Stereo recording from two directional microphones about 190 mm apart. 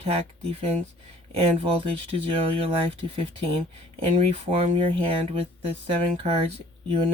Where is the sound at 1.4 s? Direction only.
30° right (ahead or behind).